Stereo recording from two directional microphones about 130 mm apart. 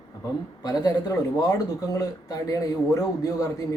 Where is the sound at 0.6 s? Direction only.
30° left (ahead or behind).